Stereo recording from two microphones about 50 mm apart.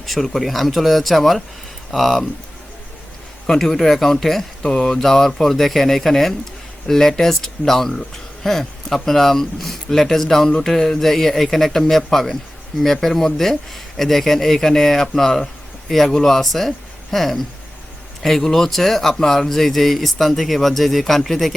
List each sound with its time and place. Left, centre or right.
0.0 s speech: centre
3.4 s speech: centre